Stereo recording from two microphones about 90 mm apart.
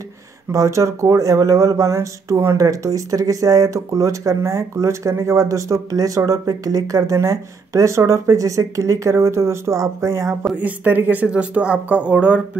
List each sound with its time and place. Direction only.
0.5 s speech: 35° right (ahead or behind)
10.4 s speech: 15° right (ahead or behind)